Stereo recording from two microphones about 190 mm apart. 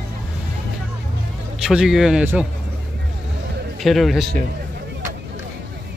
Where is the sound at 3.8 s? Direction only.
Centre (ahead or behind).